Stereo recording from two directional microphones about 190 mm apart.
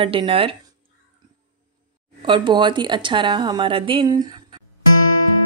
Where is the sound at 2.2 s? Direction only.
25° right (ahead or behind).